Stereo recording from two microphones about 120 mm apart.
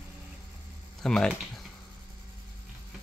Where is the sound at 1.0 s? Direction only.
5° left (ahead or behind).